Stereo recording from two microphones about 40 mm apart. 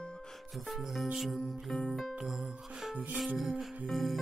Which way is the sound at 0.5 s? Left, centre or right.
Centre.